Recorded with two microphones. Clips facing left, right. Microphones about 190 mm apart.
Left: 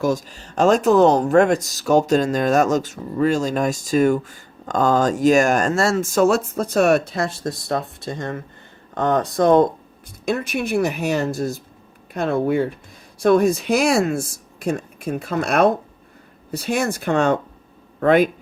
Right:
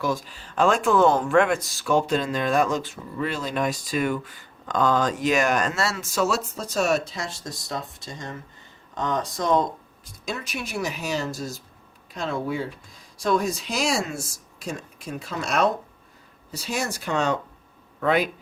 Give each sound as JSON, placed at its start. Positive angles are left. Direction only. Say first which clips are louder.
{"t": 0.0, "sound": "speech", "louder": "left 6 dB", "side_deg": 45}